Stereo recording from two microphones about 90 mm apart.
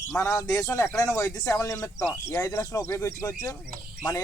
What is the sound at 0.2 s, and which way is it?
Speech, 35° left (ahead or behind).